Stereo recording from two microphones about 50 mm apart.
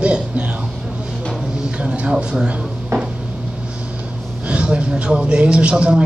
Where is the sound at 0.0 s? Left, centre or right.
Right.